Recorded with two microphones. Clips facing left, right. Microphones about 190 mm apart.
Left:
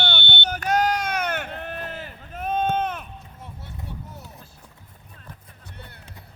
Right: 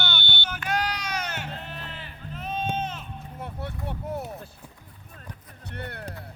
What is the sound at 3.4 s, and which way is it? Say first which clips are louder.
Vehicle: right 7 dB; 60° right (ahead or behind).